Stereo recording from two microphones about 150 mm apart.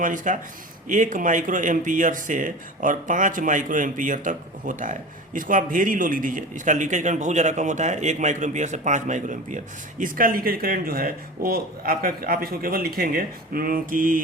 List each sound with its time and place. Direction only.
0.0 s speech: 60° right (ahead or behind)